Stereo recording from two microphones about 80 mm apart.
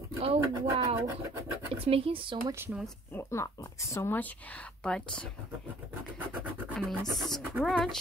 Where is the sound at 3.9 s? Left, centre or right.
Left.